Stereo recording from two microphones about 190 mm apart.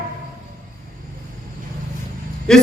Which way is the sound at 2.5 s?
5° left (ahead or behind).